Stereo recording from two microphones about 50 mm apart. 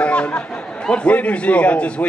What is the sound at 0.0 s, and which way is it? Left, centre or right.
A man's voice, left.